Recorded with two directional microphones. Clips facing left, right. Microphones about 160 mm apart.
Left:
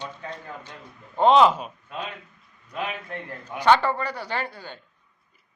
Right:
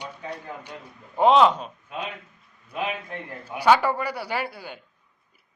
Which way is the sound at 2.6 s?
15° right (ahead or behind).